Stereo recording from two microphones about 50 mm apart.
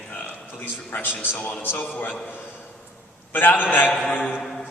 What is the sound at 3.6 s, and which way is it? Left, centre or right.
Speech, left.